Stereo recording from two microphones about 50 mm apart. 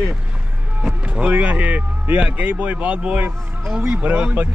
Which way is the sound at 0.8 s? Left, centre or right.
Right.